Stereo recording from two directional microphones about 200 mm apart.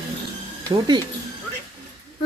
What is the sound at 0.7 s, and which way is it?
Speech, 20° right (ahead or behind).